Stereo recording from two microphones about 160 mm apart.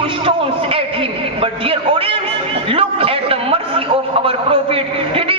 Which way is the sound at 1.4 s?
35° right (ahead or behind).